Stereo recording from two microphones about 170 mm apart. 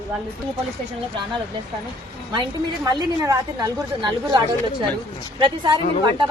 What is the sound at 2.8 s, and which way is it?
A woman's voice, 20° right (ahead or behind).